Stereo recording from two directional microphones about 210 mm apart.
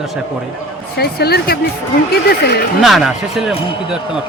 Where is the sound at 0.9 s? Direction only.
50° left (ahead or behind).